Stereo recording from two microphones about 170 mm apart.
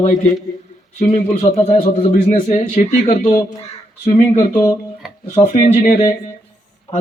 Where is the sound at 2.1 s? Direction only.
45° left (ahead or behind).